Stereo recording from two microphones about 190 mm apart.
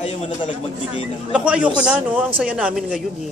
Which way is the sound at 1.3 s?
5° right (ahead or behind).